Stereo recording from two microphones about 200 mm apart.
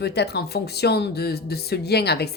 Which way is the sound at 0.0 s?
55° left (ahead or behind).